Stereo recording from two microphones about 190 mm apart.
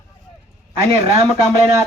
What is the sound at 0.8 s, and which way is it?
Speech, 35° right (ahead or behind).